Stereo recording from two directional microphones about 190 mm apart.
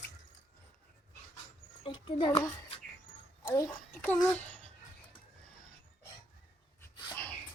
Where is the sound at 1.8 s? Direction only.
25° left (ahead or behind).